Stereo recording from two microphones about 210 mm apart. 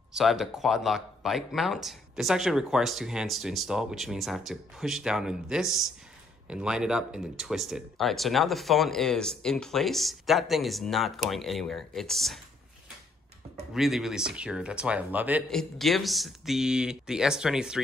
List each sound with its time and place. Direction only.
0.1 s speech: centre (ahead or behind)
13.7 s speech: centre (ahead or behind)